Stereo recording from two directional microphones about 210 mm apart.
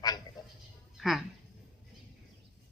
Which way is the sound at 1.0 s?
Centre (ahead or behind).